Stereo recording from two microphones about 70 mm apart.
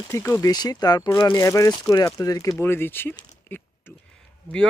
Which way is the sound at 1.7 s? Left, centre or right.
Left.